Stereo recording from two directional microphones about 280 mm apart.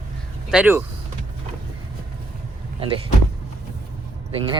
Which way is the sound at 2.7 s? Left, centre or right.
Centre.